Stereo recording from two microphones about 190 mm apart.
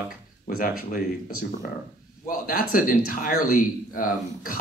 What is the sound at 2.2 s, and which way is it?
Speech, 50° left (ahead or behind).